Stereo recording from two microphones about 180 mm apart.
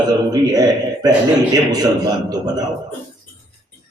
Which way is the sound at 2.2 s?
20° right (ahead or behind).